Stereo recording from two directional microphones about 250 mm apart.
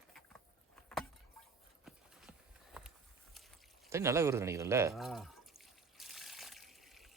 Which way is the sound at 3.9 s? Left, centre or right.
Centre.